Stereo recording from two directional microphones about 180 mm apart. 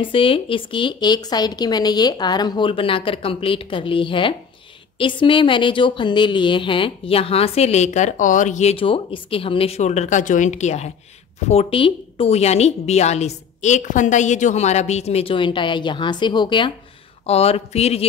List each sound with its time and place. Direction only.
0.0 s a woman's voice: 30° left (ahead or behind)